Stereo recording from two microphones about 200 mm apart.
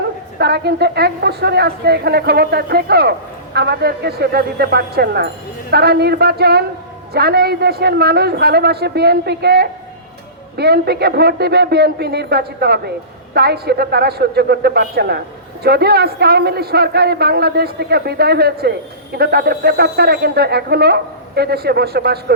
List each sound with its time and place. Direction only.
0.3 s a woman's voice: 55° right (ahead or behind)